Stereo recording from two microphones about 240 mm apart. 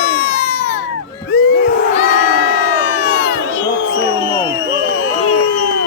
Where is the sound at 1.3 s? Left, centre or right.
Left.